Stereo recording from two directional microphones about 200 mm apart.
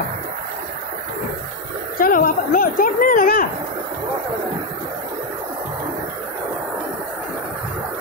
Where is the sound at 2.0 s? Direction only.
45° left (ahead or behind).